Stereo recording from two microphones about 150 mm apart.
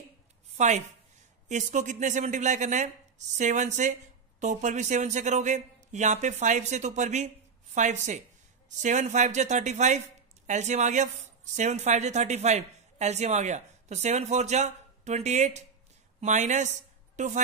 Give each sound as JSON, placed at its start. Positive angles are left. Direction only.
{"t": 0.6, "sound": "speech", "side_deg": -50}